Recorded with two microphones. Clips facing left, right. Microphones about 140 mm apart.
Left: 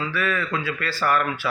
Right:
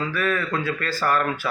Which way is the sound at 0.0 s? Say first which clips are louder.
Right 1 dB; 45° right (ahead or behind).